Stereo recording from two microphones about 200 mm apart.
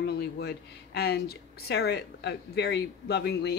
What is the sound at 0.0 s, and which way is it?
Speech, 55° left (ahead or behind).